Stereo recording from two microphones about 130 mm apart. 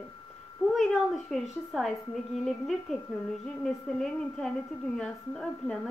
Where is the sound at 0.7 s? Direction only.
Centre (ahead or behind).